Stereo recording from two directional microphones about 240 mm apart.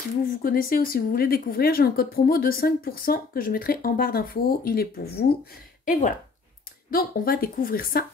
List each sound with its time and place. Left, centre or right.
0.2 s a woman's voice: left